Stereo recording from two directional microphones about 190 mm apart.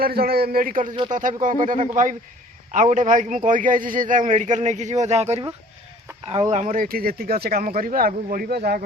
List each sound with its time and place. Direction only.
0.0 s a man's voice: 55° right (ahead or behind)